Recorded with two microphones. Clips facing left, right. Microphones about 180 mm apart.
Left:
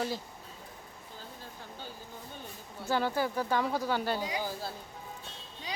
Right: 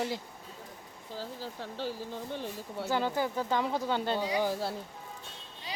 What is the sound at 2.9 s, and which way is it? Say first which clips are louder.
Speech: left 1 dB; 15° right (ahead or behind).